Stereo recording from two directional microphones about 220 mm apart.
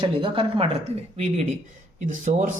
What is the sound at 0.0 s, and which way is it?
Speech, 25° right (ahead or behind).